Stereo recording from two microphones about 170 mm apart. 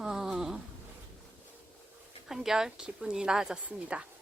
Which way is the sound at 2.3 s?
5° right (ahead or behind).